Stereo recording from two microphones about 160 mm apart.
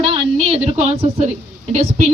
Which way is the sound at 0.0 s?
35° right (ahead or behind).